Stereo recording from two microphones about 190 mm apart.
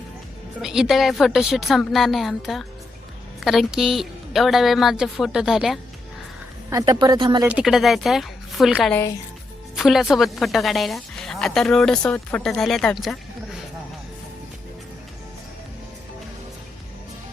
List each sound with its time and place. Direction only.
0.6 s a woman's voice: 5° right (ahead or behind)
6.7 s speech: 20° right (ahead or behind)
7.4 s a woman's voice: 5° right (ahead or behind)